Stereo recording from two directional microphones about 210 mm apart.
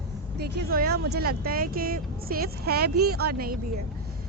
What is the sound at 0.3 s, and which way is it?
A woman's voice, 50° right (ahead or behind).